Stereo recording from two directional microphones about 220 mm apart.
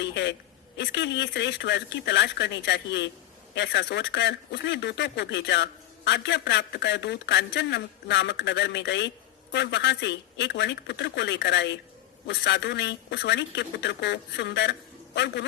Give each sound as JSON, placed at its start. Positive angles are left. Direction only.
{"t": 0.0, "sound": "a man's voice", "side_deg": 50}